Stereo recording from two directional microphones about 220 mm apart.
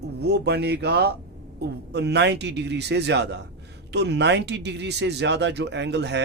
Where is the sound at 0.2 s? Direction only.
50° right (ahead or behind).